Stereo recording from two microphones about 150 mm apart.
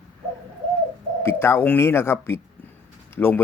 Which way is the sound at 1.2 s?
15° left (ahead or behind).